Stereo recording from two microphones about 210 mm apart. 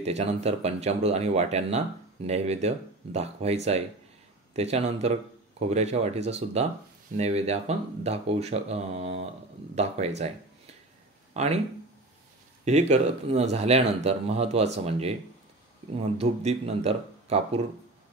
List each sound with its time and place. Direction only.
0.0 s speech: 30° right (ahead or behind)
11.3 s speech: 30° right (ahead or behind)
12.6 s speech: 35° right (ahead or behind)